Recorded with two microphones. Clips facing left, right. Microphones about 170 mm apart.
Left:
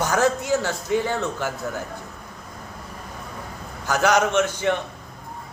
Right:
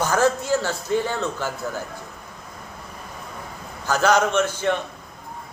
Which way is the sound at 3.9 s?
20° left (ahead or behind).